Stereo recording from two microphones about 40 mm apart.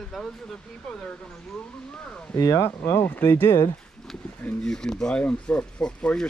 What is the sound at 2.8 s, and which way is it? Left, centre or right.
Speech, left.